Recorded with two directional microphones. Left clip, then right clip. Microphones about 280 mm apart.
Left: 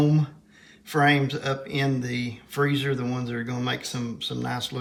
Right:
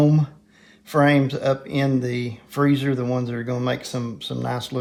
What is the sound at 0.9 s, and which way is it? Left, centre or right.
Speech, right.